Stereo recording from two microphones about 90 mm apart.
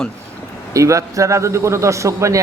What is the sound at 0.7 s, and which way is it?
A man's voice, 35° right (ahead or behind).